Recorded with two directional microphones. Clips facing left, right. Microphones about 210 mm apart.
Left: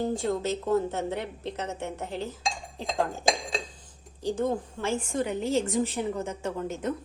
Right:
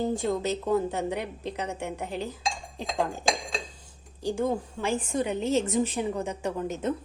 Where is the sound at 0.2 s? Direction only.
15° right (ahead or behind).